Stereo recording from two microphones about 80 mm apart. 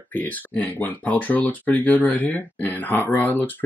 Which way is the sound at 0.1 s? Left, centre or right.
Centre.